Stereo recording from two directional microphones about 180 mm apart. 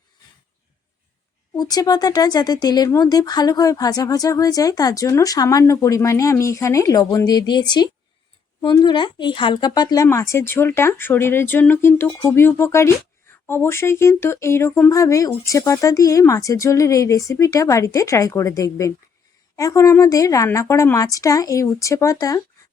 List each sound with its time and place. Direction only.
1.5 s speech: 20° left (ahead or behind)